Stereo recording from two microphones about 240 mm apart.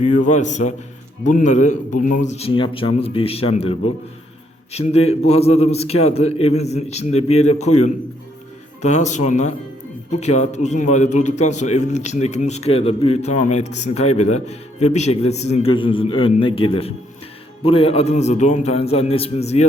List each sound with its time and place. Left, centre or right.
0.0 s a man's voice: left
8.8 s a man's voice: left